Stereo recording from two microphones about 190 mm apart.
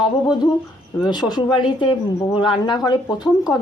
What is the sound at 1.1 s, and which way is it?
A woman's voice, 20° left (ahead or behind).